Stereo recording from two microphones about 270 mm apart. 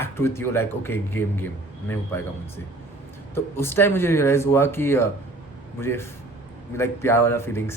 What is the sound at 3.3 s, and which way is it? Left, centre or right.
Speech, centre.